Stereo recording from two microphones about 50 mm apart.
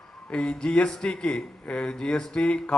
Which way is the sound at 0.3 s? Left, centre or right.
Left.